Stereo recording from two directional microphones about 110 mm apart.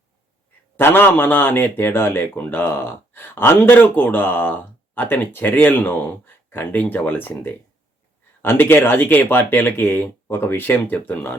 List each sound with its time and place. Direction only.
0.8 s a man's voice: 20° left (ahead or behind)